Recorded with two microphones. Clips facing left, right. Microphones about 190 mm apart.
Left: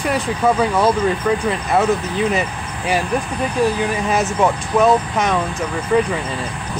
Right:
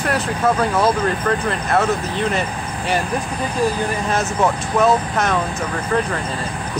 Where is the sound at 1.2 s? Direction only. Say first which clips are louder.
Left 2 dB; 5° left (ahead or behind).